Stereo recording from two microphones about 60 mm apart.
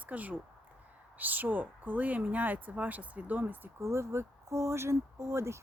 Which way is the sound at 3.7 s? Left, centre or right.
Right.